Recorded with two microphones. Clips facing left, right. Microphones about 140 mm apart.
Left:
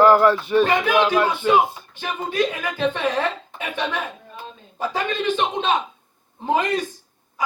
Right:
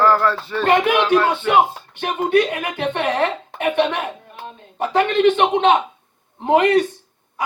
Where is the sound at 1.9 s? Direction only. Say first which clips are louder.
Right 6 dB; 65° right (ahead or behind).